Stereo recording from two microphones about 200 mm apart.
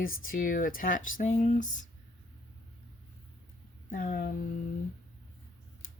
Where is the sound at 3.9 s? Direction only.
45° left (ahead or behind).